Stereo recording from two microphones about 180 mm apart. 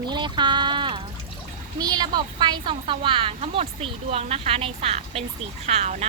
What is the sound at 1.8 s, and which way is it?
A woman's voice, 25° right (ahead or behind).